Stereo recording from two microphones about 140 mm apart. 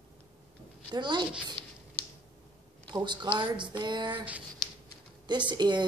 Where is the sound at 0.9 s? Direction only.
35° right (ahead or behind).